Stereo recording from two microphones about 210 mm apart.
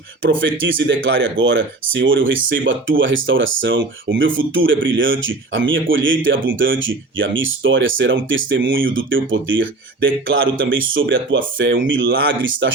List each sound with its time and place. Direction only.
0.2 s speech: 65° right (ahead or behind)